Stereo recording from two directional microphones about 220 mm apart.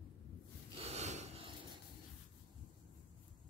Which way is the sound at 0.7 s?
30° right (ahead or behind).